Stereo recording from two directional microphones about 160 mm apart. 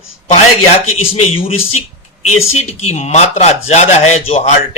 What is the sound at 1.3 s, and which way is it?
A man's voice, 35° left (ahead or behind).